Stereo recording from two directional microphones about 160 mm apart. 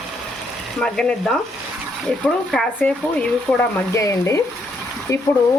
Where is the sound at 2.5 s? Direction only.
5° left (ahead or behind).